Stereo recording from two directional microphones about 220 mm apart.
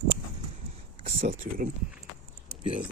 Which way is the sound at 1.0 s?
35° right (ahead or behind).